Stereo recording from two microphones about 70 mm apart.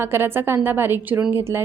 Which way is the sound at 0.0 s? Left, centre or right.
Right.